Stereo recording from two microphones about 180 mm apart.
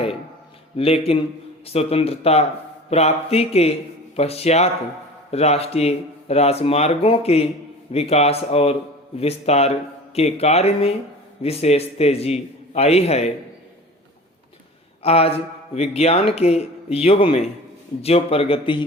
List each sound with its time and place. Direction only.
0.8 s speech: 35° left (ahead or behind)
15.0 s speech: 35° left (ahead or behind)